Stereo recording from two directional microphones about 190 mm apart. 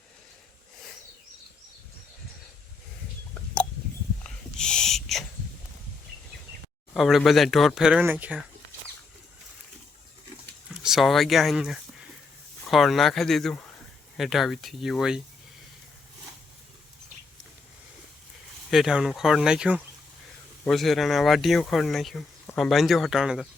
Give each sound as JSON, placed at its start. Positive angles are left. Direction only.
{"t": 4.2, "sound": "a sound", "side_deg": 5}
{"t": 6.9, "sound": "speech", "side_deg": 0}
{"t": 10.8, "sound": "speech", "side_deg": 0}
{"t": 18.7, "sound": "speech", "side_deg": 0}